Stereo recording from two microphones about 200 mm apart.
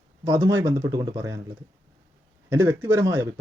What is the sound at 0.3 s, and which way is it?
Speech, 15° right (ahead or behind).